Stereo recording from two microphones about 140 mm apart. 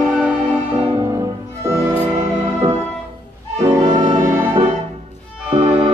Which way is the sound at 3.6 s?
30° right (ahead or behind).